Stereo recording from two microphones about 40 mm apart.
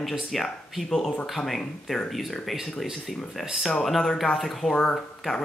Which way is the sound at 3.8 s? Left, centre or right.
Centre.